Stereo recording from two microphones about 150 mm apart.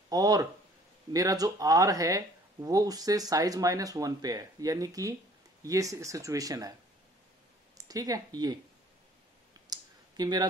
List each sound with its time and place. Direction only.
0.1 s speech: 25° right (ahead or behind)
7.7 s a sound: 25° right (ahead or behind)
8.4 s speech: 30° right (ahead or behind)
9.7 s clicking: 25° right (ahead or behind)